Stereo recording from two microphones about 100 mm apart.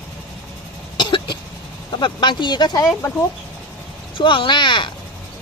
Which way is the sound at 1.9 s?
50° left (ahead or behind).